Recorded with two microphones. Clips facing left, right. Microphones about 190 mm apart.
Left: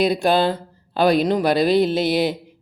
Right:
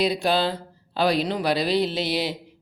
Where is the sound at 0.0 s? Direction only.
50° left (ahead or behind).